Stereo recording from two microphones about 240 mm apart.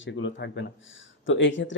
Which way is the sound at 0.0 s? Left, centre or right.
Left.